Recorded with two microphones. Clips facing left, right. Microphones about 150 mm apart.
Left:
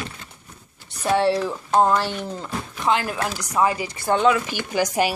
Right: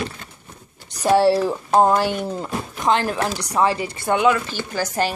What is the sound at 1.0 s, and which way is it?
Speech, 40° right (ahead or behind).